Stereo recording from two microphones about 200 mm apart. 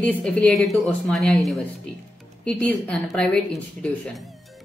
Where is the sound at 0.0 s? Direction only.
5° left (ahead or behind).